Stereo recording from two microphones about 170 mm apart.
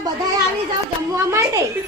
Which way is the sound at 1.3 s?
20° right (ahead or behind).